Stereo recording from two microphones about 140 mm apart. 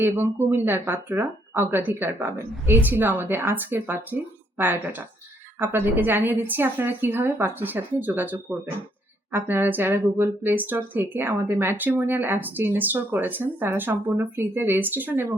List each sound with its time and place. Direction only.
0.0 s speech: 15° right (ahead or behind)